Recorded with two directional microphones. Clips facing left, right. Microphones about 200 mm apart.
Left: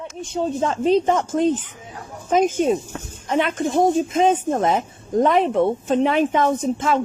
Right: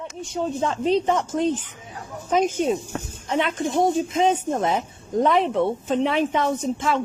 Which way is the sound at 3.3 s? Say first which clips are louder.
Left 3 dB; 50° left (ahead or behind).